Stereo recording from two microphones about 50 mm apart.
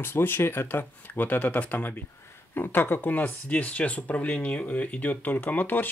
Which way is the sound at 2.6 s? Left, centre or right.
Left.